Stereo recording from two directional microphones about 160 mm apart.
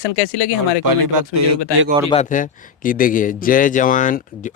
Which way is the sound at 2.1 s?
50° left (ahead or behind).